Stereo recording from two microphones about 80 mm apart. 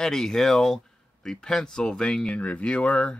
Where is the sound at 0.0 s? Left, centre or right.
Centre.